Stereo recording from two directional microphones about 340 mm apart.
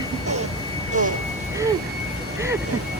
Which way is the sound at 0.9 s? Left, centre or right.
Right.